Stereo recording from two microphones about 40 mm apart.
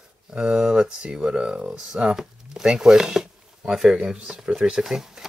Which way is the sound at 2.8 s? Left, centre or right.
Centre.